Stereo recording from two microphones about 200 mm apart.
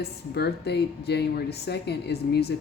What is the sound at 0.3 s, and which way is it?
Speech, 55° left (ahead or behind).